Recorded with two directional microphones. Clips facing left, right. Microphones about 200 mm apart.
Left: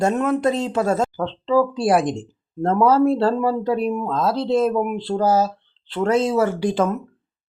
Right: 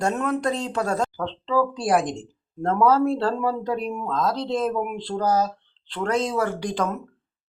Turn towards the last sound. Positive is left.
turn(degrees=5)  # may be behind; listen again after turning